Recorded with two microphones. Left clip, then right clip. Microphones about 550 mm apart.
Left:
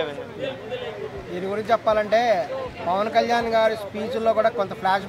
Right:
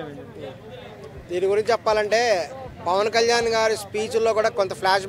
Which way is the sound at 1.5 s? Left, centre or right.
Right.